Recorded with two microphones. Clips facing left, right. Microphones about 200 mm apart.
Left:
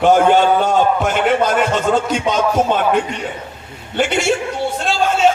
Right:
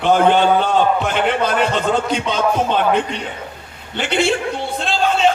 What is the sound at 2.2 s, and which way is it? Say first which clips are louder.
Speech: left 2 dB; 45° left (ahead or behind).